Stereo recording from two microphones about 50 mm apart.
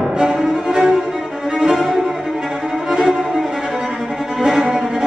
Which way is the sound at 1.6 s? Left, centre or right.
Centre.